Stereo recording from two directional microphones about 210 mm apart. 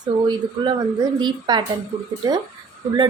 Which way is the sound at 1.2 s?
20° right (ahead or behind).